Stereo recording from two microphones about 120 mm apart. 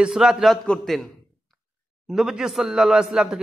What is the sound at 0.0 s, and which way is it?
A woman's voice, 5° right (ahead or behind).